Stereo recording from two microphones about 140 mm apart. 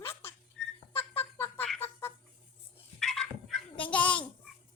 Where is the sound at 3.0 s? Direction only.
5° left (ahead or behind).